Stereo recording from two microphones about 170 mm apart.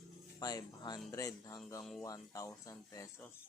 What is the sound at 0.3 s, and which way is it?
Speech, 20° left (ahead or behind).